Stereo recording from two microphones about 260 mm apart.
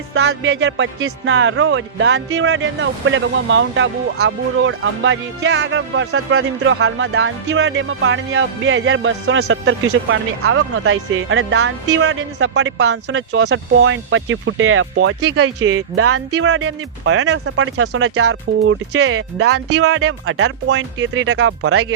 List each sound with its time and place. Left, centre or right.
0.1 s music: right
19.6 s music: right